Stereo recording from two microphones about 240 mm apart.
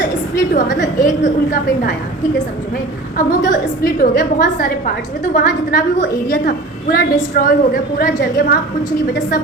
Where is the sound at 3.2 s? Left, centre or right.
Left.